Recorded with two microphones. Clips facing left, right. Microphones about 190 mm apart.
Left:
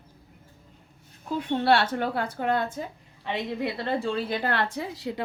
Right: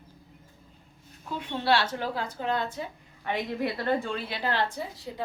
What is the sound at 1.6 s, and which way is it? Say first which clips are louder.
A woman's voice: left 2 dB; 55° left (ahead or behind).